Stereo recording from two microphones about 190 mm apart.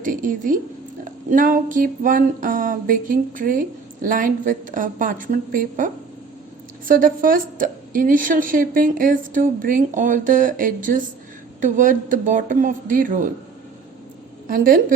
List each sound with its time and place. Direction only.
0.0 s a woman's voice: 45° right (ahead or behind)
14.4 s a woman's voice: 50° right (ahead or behind)